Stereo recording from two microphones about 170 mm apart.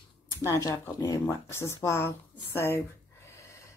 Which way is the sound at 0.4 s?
15° left (ahead or behind).